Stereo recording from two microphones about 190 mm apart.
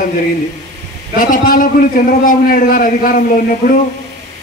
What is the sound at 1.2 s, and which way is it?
A man's voice, 45° left (ahead or behind).